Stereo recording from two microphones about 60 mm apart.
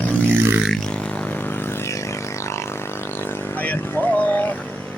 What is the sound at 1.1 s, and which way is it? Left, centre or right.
Vehicle, left.